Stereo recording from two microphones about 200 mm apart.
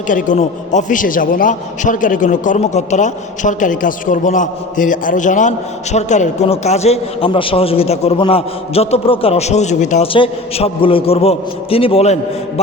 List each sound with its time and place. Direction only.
0.1 s a man's voice: 40° left (ahead or behind)